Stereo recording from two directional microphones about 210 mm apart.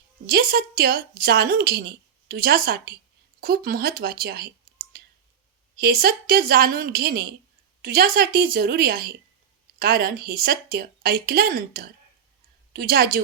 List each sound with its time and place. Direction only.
0.3 s a woman's voice: 45° right (ahead or behind)